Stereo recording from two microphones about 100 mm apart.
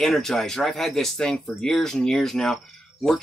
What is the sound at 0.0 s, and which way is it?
Speech, 5° left (ahead or behind).